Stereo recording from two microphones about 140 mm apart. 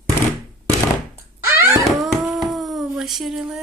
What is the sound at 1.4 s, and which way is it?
Dog, 15° right (ahead or behind).